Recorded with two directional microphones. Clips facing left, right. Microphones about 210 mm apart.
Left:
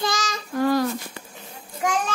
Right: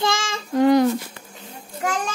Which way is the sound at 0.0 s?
25° right (ahead or behind).